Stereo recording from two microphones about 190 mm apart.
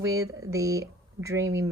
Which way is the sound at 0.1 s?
15° right (ahead or behind).